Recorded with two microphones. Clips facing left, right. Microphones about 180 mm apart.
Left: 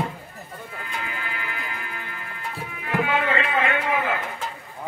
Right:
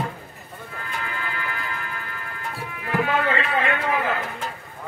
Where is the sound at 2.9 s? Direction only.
40° right (ahead or behind).